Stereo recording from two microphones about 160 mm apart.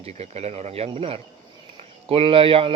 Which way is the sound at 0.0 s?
45° right (ahead or behind).